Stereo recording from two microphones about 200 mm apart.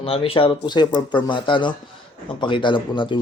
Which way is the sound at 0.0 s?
30° left (ahead or behind).